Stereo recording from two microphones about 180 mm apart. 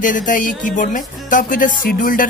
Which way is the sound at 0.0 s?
45° left (ahead or behind).